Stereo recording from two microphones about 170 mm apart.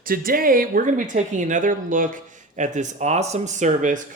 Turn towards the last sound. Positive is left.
turn(degrees=-50)  # may be behind; listen again after turning